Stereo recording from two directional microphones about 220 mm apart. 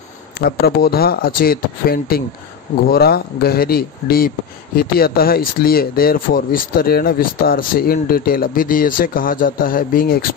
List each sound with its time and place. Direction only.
0.4 s speech: 45° left (ahead or behind)